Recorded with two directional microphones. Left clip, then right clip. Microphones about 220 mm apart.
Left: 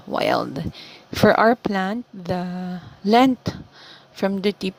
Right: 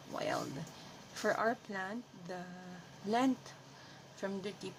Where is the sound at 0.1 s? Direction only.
40° left (ahead or behind).